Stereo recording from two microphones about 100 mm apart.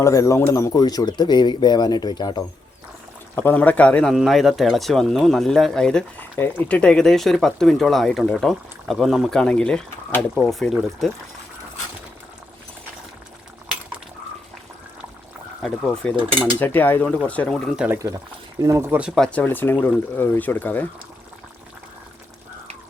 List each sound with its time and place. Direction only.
0.0 s speech: 35° left (ahead or behind)
3.3 s speech: 20° left (ahead or behind)
4.1 s speech: centre (ahead or behind)
9.3 s speech: 10° left (ahead or behind)
15.6 s speech: 5° left (ahead or behind)
16.6 s speech: 20° left (ahead or behind)
17.5 s speech: centre (ahead or behind)
18.8 s speech: 20° right (ahead or behind)
19.1 s speech: 10° left (ahead or behind)